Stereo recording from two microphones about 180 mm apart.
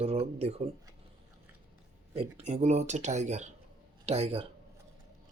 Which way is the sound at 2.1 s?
35° right (ahead or behind).